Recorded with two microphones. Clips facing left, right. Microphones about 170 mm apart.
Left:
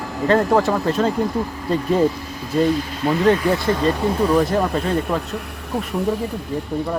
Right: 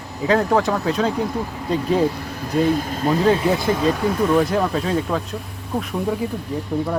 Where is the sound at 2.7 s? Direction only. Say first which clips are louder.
Right 1 dB; 45° right (ahead or behind).